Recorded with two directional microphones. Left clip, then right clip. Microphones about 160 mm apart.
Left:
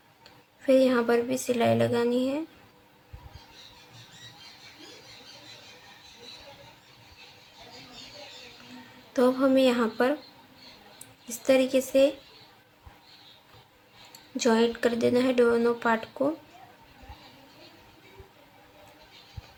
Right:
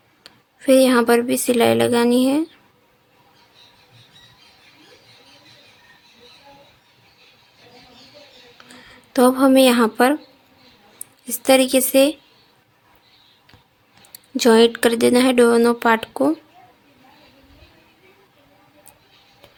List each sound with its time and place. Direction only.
0.2 s speech: 90° right
9.1 s speech: 90° right
11.4 s speech: 90° right
14.3 s speech: 90° right